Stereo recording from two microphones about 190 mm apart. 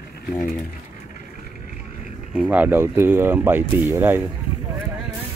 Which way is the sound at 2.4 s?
10° right (ahead or behind).